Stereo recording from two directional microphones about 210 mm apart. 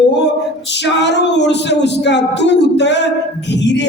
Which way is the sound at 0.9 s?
55° left (ahead or behind).